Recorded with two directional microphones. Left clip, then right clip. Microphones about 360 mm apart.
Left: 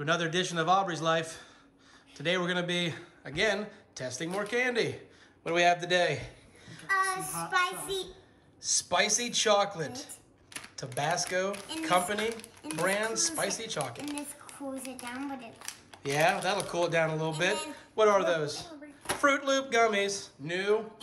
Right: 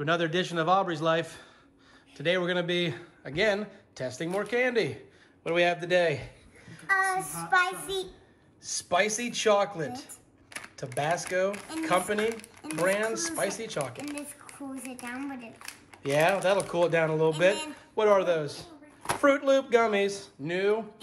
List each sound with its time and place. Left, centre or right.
0.0 s a man's voice: centre
8.6 s speech: centre